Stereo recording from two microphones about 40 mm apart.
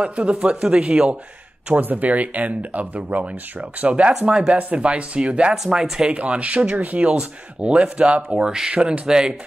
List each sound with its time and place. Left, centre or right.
0.1 s speech: right
1.8 s speech: right
4.1 s speech: centre
4.6 s speech: right
5.5 s speech: centre
6.0 s speech: right
6.8 s speech: right
7.2 s speech: right